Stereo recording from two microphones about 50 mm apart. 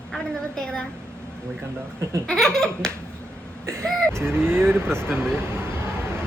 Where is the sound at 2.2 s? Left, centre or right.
Centre.